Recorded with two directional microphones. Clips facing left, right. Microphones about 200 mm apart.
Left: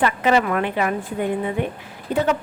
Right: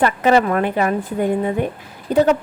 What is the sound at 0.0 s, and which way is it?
Speech, 40° right (ahead or behind).